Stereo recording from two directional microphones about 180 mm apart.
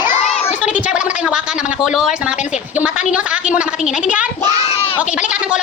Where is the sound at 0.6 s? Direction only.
5° right (ahead or behind).